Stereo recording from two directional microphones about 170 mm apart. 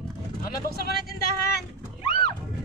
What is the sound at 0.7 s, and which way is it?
Speech, 65° left (ahead or behind).